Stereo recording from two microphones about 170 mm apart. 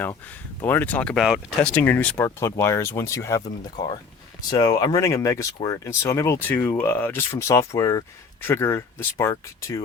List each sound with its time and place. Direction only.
0.6 s speech: 10° left (ahead or behind)